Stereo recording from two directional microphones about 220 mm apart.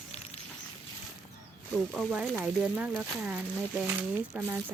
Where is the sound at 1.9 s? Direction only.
Centre (ahead or behind).